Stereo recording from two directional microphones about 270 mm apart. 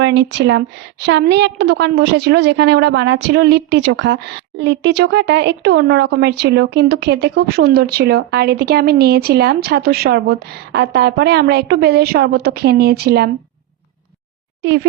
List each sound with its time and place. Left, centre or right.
0.0 s a woman's voice: right